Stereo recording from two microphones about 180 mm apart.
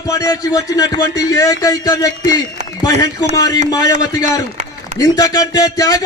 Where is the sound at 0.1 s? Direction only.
20° left (ahead or behind).